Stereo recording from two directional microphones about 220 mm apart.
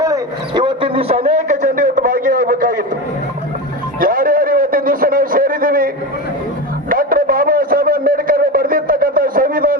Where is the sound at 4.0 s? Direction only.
40° right (ahead or behind).